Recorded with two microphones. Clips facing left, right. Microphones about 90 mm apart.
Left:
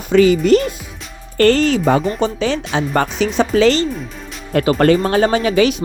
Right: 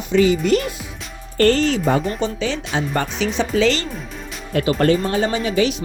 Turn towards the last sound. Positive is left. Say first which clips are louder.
# left 5 dB
turn(degrees=60)  # may be behind; listen again after turning